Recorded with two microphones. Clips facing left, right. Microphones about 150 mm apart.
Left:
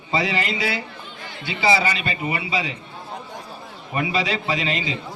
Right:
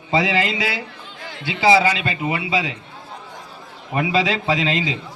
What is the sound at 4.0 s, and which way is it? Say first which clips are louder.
Speech: right 4 dB; 90° right.